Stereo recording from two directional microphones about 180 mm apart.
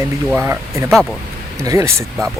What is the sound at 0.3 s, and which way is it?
Speech, 15° right (ahead or behind).